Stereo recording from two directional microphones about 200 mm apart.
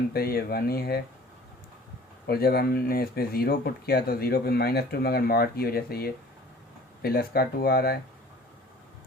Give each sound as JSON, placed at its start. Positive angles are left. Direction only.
{"t": 0.1, "sound": "speech", "side_deg": 50}
{"t": 2.2, "sound": "speech", "side_deg": 50}